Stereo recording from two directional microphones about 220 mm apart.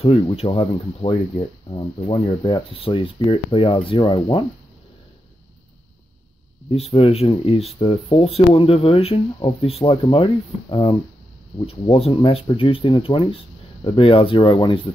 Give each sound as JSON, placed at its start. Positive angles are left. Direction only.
{"t": 0.0, "sound": "speech", "side_deg": 25}
{"t": 6.7, "sound": "speech", "side_deg": 25}